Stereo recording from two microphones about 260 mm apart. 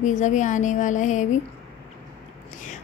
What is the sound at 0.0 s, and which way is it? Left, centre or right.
A woman's voice, left.